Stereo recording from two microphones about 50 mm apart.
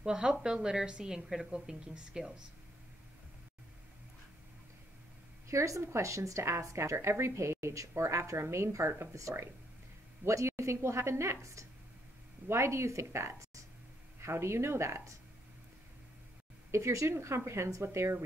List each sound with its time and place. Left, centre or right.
0.0 s a woman's voice: centre
5.5 s a woman's voice: right
10.2 s a woman's voice: right
14.2 s a woman's voice: right
16.7 s a woman's voice: right
17.8 s a woman's voice: right